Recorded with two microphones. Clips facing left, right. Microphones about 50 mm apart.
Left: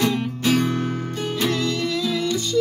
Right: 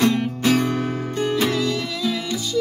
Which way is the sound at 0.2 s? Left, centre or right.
Right.